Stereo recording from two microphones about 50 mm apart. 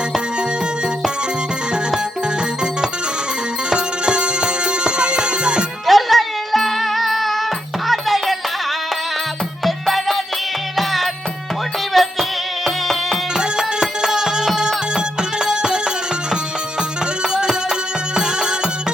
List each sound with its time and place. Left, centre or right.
3.7 s music: centre
5.8 s music: centre
9.6 s music: centre
13.3 s music: centre
17.2 s music: centre